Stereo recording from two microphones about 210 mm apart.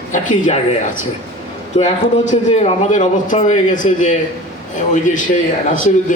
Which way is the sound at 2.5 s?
30° left (ahead or behind).